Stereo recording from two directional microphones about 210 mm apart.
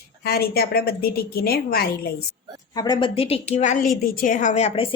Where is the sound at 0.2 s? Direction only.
50° left (ahead or behind).